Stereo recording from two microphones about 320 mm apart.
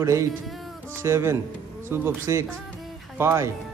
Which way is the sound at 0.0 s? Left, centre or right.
Centre.